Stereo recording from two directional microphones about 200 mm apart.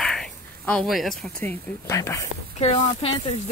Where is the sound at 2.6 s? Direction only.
30° left (ahead or behind).